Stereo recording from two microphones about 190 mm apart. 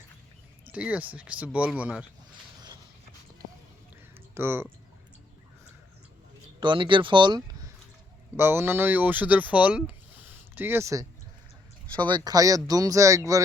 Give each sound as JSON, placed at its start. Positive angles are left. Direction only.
{"t": 0.7, "sound": "speech", "side_deg": -5}
{"t": 4.4, "sound": "speech", "side_deg": -10}
{"t": 6.6, "sound": "speech", "side_deg": -25}
{"t": 8.4, "sound": "speech", "side_deg": -10}
{"t": 12.0, "sound": "speech", "side_deg": -20}